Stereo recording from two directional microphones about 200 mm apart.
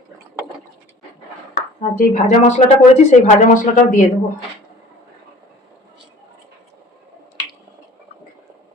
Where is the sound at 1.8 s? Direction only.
40° left (ahead or behind).